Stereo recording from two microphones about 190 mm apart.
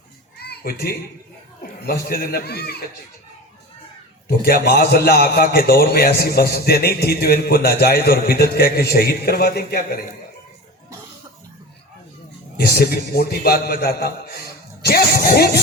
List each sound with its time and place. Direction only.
0.3 s music: 55° left (ahead or behind)
1.9 s a man's voice: 55° left (ahead or behind)
4.3 s a man's voice: 55° left (ahead or behind)
12.5 s a man's voice: 55° left (ahead or behind)